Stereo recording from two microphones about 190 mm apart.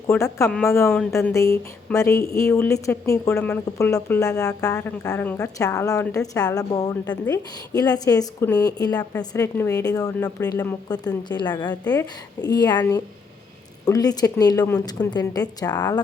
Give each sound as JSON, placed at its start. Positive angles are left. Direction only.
{"t": 0.1, "sound": "a woman's voice", "side_deg": 15}
{"t": 10.9, "sound": "a woman's voice", "side_deg": 20}
{"t": 13.8, "sound": "a woman's voice", "side_deg": 20}